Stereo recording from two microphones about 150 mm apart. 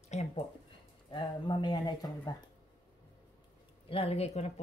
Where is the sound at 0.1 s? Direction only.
50° left (ahead or behind).